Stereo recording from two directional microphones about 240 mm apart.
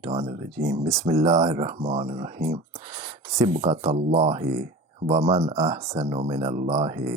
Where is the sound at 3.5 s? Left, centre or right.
Right.